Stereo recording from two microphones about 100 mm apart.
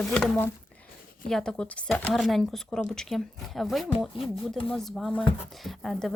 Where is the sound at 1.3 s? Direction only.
5° left (ahead or behind).